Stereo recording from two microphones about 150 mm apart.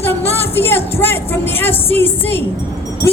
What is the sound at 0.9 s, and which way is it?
A woman's voice, 15° left (ahead or behind).